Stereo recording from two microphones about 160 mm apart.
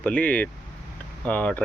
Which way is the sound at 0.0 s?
10° left (ahead or behind).